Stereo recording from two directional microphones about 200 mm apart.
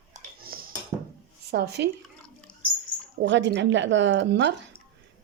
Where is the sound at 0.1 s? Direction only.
45° right (ahead or behind).